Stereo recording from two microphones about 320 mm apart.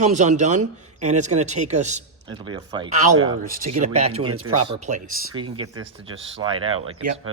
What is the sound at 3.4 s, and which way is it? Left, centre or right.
Speech, right.